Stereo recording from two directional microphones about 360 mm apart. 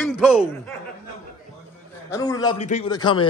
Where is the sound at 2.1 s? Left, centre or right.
Centre.